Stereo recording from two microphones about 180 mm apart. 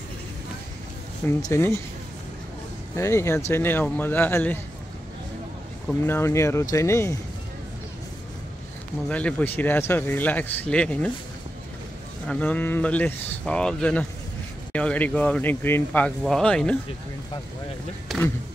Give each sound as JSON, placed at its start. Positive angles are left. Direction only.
{"t": 1.2, "sound": "speech", "side_deg": 15}
{"t": 3.0, "sound": "speech", "side_deg": 15}
{"t": 6.0, "sound": "speech", "side_deg": 15}
{"t": 9.1, "sound": "speech", "side_deg": 10}
{"t": 12.3, "sound": "speech", "side_deg": 10}
{"t": 18.0, "sound": "speech", "side_deg": 0}